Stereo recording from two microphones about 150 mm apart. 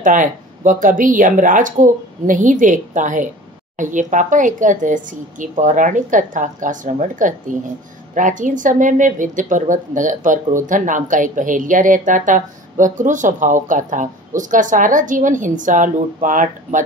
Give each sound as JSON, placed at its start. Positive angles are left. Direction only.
{"t": 0.0, "sound": "a woman's voice", "side_deg": -60}